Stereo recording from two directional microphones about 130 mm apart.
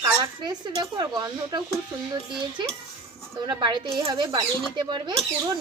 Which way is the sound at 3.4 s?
35° right (ahead or behind).